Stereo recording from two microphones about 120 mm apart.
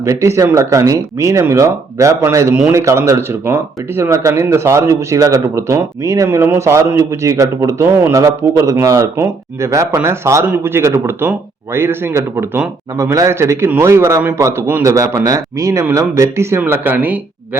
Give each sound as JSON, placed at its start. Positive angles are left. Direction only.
{"t": 0.0, "sound": "speech", "side_deg": -25}